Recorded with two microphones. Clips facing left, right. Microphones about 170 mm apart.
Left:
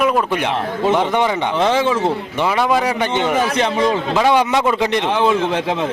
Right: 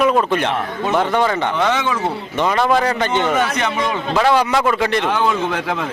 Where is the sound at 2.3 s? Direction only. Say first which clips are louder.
Right 3 dB; 10° left (ahead or behind).